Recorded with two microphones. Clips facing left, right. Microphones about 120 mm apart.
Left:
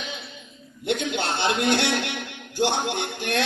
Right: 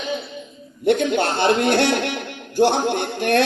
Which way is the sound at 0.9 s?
50° right (ahead or behind).